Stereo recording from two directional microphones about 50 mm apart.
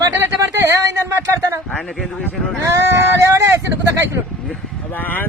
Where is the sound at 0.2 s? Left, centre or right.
Right.